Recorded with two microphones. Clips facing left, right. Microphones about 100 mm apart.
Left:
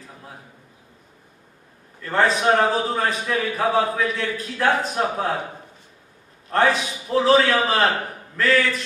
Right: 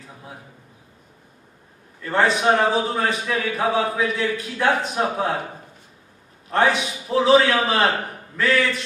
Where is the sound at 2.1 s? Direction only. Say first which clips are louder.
Even; 35° left (ahead or behind).